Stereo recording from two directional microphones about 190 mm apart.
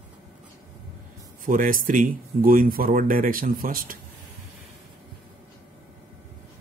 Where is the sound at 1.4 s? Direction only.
45° right (ahead or behind).